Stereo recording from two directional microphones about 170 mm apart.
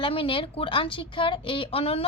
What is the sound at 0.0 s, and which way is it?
A woman's voice, 30° left (ahead or behind).